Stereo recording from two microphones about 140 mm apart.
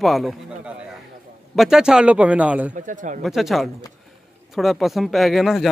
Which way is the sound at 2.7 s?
65° right (ahead or behind).